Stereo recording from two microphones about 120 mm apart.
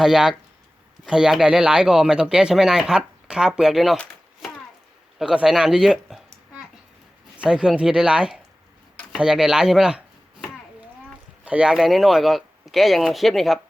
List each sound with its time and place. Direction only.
0.0 s speech: 5° right (ahead or behind)
5.2 s speech: 5° right (ahead or behind)
7.3 s speech: 5° right (ahead or behind)
11.4 s speech: 10° right (ahead or behind)